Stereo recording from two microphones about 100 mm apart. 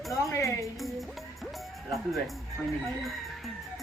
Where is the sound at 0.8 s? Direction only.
Centre (ahead or behind).